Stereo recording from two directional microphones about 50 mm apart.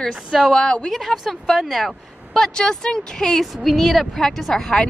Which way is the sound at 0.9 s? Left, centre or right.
Centre.